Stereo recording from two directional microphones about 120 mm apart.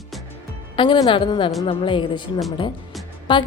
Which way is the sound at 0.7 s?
40° left (ahead or behind).